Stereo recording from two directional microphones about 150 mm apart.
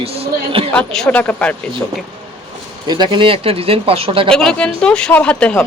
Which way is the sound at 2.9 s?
30° right (ahead or behind).